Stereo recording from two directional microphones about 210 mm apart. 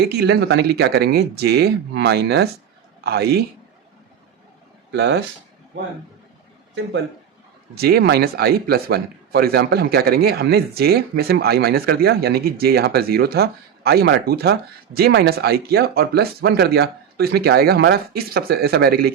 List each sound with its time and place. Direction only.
0.0 s a man's voice: 50° right (ahead or behind)
4.9 s speech: 55° right (ahead or behind)
7.8 s speech: 50° right (ahead or behind)